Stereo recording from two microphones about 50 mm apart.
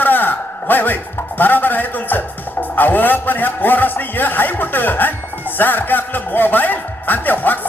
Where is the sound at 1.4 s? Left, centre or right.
Left.